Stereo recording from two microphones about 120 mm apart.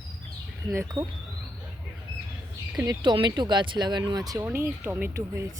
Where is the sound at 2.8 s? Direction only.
35° right (ahead or behind).